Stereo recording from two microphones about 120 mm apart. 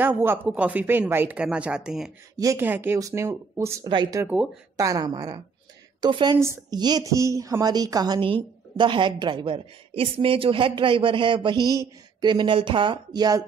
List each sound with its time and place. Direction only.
0.0 s speech: 15° right (ahead or behind)
2.3 s speech: 30° right (ahead or behind)
2.6 s speech: 15° right (ahead or behind)
3.8 s a woman's voice: 40° right (ahead or behind)
6.3 s speech: 20° right (ahead or behind)
6.7 s a woman's voice: 35° right (ahead or behind)